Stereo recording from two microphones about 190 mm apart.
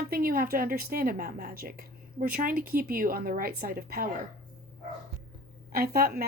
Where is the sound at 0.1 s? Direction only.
50° right (ahead or behind).